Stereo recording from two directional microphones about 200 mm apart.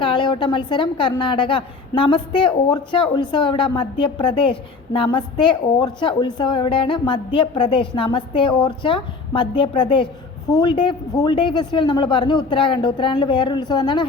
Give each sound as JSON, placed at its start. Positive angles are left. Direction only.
{"t": 0.0, "sound": "a woman's voice", "side_deg": 25}